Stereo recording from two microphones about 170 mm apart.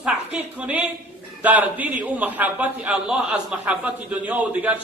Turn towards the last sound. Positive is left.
turn(degrees=-10)  # may be behind; listen again after turning